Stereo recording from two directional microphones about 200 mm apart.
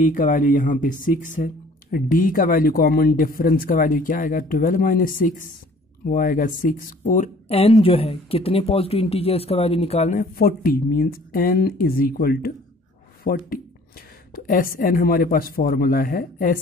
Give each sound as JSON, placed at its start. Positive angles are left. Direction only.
{"t": 0.0, "sound": "speech", "side_deg": 40}
{"t": 10.3, "sound": "speech", "side_deg": 45}